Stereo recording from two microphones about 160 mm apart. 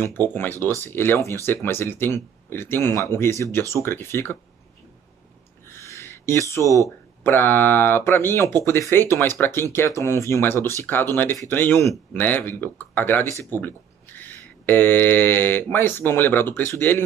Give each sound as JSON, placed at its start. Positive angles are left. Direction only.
{"t": 0.0, "sound": "speech", "side_deg": 15}
{"t": 5.7, "sound": "a sound", "side_deg": 15}
{"t": 7.2, "sound": "speech", "side_deg": 15}